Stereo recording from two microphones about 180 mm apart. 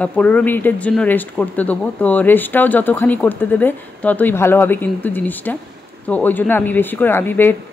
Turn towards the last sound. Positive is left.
turn(degrees=10)  # may be behind; listen again after turning